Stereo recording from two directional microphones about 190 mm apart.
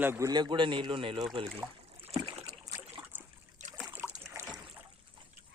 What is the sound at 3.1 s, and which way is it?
Trickle, 10° right (ahead or behind).